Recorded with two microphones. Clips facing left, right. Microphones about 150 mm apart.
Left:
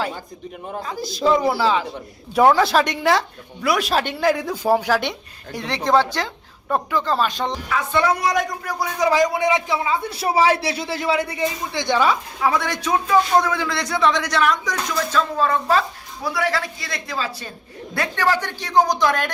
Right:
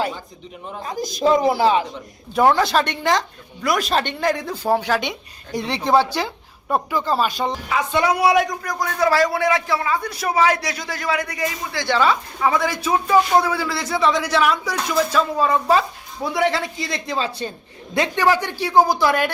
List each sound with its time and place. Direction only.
0.9 s a man's voice: 20° right (ahead or behind)
2.3 s speech: centre (ahead or behind)
5.5 s speech: 10° right (ahead or behind); by 12.1 s 15° left (ahead or behind)
12.4 s a man's voice: centre (ahead or behind); by 17.5 s 25° right (ahead or behind)
17.9 s a man's voice: 15° right (ahead or behind)